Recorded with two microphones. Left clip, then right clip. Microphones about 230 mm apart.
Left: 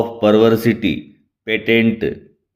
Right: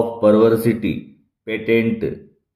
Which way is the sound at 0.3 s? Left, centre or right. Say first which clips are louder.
Left 1 dB; left.